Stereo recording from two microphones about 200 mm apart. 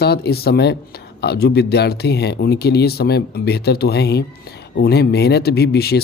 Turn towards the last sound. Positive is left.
turn(degrees=55)  # may be behind; listen again after turning